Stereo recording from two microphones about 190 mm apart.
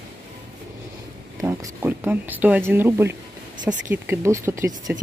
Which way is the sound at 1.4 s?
10° right (ahead or behind).